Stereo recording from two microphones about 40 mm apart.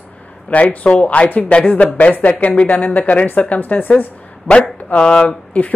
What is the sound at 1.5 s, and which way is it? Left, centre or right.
Speech, left.